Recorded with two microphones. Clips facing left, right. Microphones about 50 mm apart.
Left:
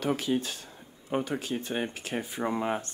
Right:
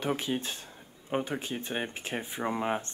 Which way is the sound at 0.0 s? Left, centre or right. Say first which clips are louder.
Left 3 dB; right.